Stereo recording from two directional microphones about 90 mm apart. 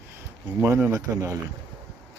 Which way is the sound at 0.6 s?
30° right (ahead or behind).